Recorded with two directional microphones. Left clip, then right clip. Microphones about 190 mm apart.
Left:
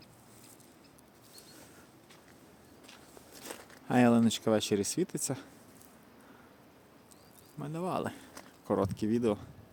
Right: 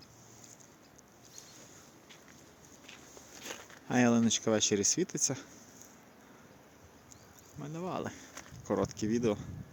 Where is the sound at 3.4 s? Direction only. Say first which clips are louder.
Right 1 dB; 15° left (ahead or behind).